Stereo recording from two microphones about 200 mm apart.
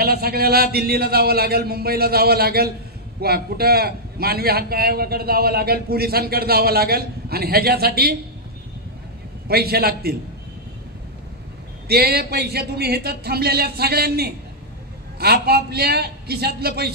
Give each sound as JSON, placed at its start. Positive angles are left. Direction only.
{"t": 0.0, "sound": "a man's voice", "side_deg": -50}
{"t": 9.5, "sound": "a man's voice", "side_deg": -50}
{"t": 11.9, "sound": "a man's voice", "side_deg": -50}